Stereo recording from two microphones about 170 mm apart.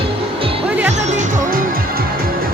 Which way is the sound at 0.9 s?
45° right (ahead or behind).